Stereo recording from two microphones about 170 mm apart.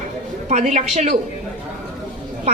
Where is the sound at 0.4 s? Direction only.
45° right (ahead or behind).